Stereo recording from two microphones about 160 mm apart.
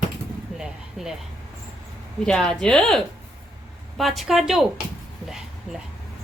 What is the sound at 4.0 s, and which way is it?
Speech, centre (ahead or behind).